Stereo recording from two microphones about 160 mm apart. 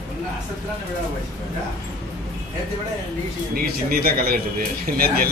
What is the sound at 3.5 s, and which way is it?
A man's voice, 70° right (ahead or behind).